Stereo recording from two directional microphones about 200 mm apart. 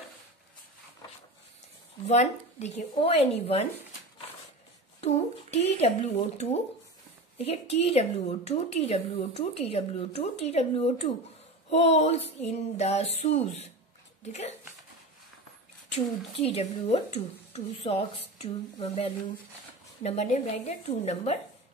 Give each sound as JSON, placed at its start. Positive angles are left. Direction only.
{"t": 2.0, "sound": "a woman's voice", "side_deg": 35}
{"t": 5.0, "sound": "a woman's voice", "side_deg": 30}
{"t": 16.3, "sound": "a woman's voice", "side_deg": 30}